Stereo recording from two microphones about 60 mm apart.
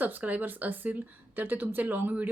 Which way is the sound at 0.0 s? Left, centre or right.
Right.